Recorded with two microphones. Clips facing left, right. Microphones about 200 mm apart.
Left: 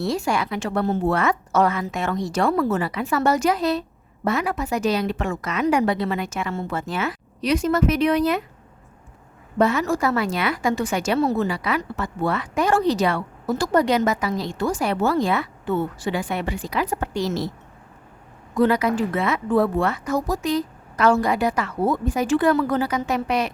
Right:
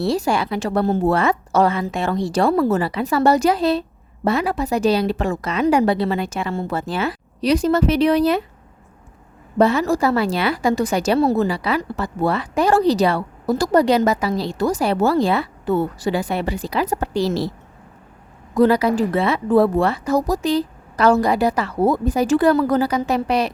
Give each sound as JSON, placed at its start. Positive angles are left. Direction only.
{"t": 0.0, "sound": "a woman's voice", "side_deg": -30}
{"t": 9.6, "sound": "a woman's voice", "side_deg": -35}
{"t": 18.5, "sound": "a woman's voice", "side_deg": -35}